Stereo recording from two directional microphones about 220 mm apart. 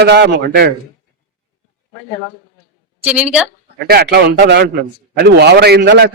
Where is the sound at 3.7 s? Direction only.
45° right (ahead or behind).